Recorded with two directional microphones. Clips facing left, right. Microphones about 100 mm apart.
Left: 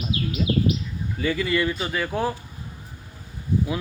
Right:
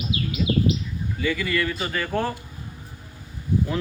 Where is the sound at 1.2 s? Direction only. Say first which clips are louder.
Left 2 dB; 30° left (ahead or behind).